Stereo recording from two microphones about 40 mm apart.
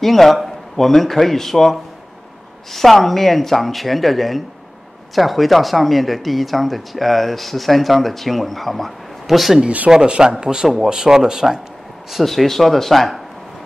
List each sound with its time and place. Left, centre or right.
0.0 s speech: centre
9.8 s speech: centre
12.1 s speech: centre